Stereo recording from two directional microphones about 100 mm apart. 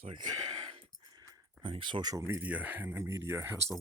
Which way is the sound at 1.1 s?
40° right (ahead or behind).